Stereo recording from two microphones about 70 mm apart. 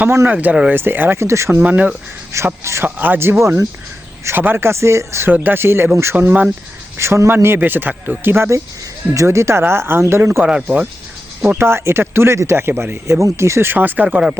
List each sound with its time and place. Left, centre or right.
0.3 s speech: right
1.2 s speech: right
1.5 s speech: right
2.3 s speech: right
2.8 s speech: right
3.4 s speech: right
5.3 s speech: right
6.1 s speech: right
6.9 s speech: right
9.1 s speech: right
10.4 s speech: centre
11.5 s speech: right